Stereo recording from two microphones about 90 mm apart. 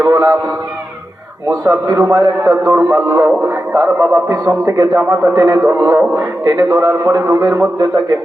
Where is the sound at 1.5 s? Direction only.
40° right (ahead or behind).